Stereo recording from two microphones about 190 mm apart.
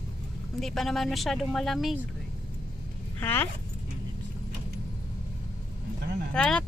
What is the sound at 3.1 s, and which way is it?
Speech, 10° left (ahead or behind).